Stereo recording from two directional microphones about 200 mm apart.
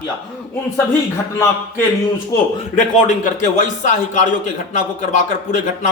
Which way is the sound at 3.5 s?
35° left (ahead or behind).